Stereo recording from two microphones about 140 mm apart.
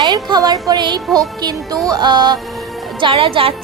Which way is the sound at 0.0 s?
30° right (ahead or behind).